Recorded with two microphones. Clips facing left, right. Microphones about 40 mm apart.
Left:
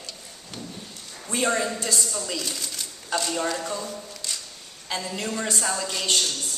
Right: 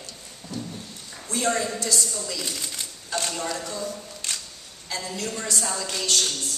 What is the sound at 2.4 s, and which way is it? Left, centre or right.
Speech, right.